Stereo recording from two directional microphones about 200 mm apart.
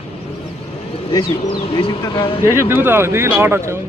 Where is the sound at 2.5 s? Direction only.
10° right (ahead or behind).